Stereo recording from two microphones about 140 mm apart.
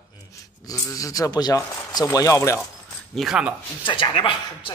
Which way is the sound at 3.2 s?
5° right (ahead or behind).